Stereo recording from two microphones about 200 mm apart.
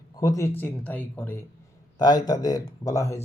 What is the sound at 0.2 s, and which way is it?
Speech, 15° left (ahead or behind).